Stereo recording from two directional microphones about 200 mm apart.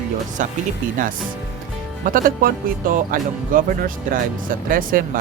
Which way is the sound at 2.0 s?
45° right (ahead or behind).